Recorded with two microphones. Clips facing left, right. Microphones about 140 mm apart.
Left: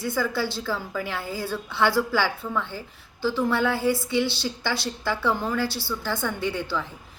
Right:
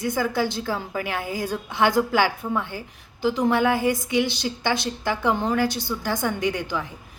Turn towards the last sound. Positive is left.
turn(degrees=-15)  # may be behind; listen again after turning